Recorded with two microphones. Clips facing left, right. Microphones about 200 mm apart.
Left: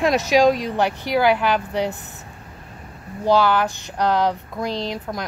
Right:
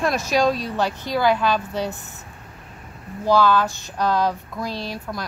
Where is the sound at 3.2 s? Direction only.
15° left (ahead or behind).